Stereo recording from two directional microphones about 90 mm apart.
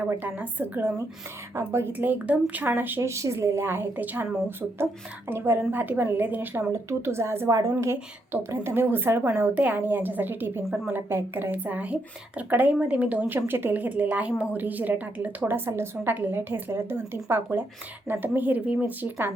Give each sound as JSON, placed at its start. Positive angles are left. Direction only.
{"t": 0.0, "sound": "speech", "side_deg": -20}